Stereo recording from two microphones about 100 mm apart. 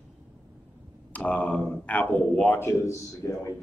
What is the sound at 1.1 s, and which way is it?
Speech, 15° left (ahead or behind).